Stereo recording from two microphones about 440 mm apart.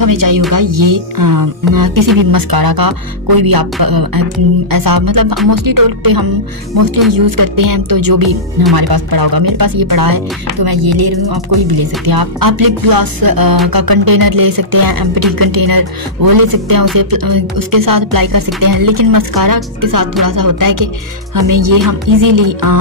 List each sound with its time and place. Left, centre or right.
0.0 s speech: right